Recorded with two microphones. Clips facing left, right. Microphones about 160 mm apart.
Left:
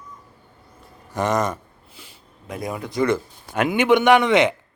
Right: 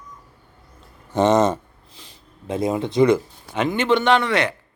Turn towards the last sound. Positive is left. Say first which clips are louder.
# left 3 dB
turn(degrees=20)  # may be behind; listen again after turning